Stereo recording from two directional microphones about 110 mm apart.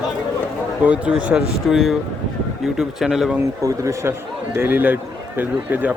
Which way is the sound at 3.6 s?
30° right (ahead or behind).